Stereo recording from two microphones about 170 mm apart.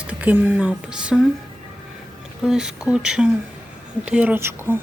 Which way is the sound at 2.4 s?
5° right (ahead or behind).